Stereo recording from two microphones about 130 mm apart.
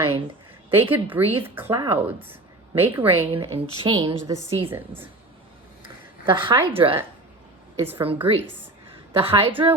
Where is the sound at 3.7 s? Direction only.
35° right (ahead or behind).